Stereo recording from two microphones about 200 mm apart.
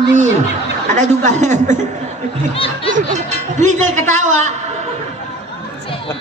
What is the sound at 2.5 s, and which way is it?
Snicker, 25° left (ahead or behind).